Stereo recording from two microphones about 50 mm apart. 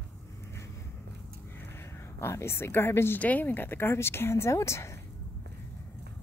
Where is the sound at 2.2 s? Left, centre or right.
Left.